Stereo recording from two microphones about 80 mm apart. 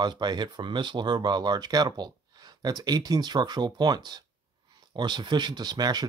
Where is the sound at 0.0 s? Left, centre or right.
Right.